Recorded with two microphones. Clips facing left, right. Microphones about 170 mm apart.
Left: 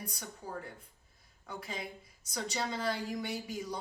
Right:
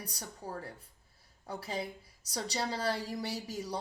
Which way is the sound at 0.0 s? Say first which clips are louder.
Right 1 dB; 35° right (ahead or behind).